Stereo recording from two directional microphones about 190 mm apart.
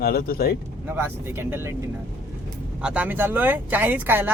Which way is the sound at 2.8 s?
5° right (ahead or behind).